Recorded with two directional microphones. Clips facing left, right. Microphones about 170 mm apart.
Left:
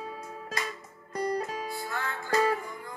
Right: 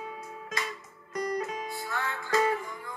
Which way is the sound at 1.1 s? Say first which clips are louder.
Left 1 dB; 30° left (ahead or behind).